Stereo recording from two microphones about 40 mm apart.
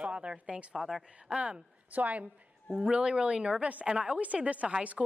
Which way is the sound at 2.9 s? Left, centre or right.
Right.